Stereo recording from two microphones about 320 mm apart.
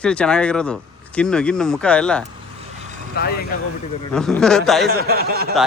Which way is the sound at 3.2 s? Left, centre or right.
Left.